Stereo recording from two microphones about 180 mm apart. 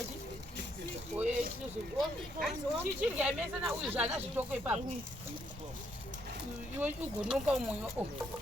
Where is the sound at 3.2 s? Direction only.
5° right (ahead or behind).